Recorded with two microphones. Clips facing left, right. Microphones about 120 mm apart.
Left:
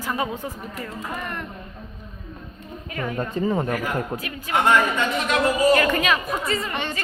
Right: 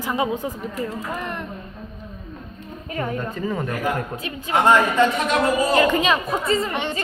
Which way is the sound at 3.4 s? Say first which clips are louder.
Left 6 dB; 25° left (ahead or behind).